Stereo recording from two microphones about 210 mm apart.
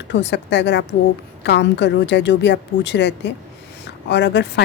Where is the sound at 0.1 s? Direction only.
55° left (ahead or behind).